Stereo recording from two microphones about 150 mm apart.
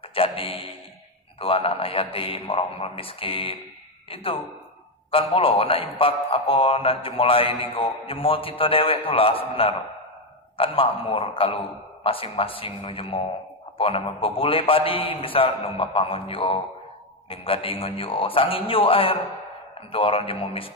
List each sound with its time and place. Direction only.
0.1 s music: 40° left (ahead or behind)
1.4 s a man's voice: 40° left (ahead or behind)